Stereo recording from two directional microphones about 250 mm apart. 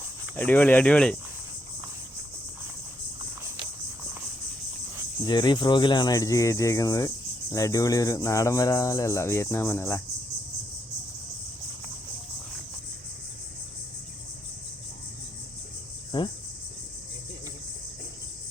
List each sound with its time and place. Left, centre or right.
0.3 s speech: centre
5.2 s speech: centre
16.1 s speech: centre